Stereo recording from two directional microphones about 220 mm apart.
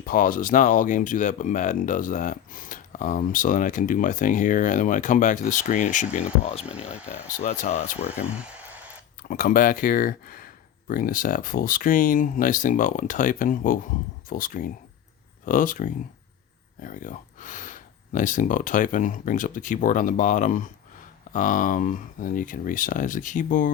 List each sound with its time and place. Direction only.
0.0 s speech: 40° left (ahead or behind)
8.0 s a sound: 5° right (ahead or behind)
9.3 s speech: 40° left (ahead or behind)